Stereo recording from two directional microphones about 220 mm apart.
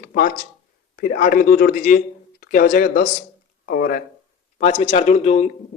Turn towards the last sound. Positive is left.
turn(degrees=30)  # may be behind; listen again after turning